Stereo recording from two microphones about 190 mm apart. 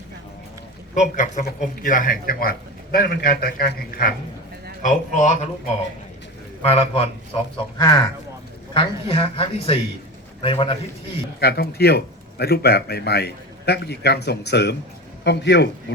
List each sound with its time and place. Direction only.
0.9 s a man's voice: 40° left (ahead or behind)
4.8 s speech: 40° left (ahead or behind)
6.6 s speech: 30° left (ahead or behind)
11.3 s a man's voice: 55° left (ahead or behind)